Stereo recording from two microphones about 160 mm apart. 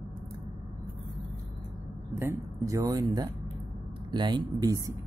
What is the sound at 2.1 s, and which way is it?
Speech, 20° right (ahead or behind).